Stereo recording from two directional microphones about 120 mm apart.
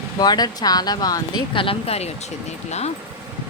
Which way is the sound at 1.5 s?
50° left (ahead or behind).